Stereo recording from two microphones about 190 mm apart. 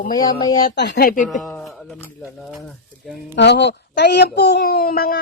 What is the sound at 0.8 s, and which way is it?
Speech, 60° left (ahead or behind).